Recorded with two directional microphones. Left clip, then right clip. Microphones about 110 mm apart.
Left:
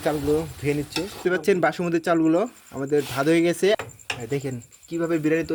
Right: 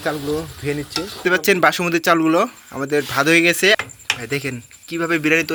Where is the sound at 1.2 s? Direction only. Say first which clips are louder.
Right 6 dB; 20° left (ahead or behind).